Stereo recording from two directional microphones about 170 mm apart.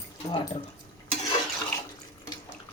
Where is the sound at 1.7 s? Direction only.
10° left (ahead or behind).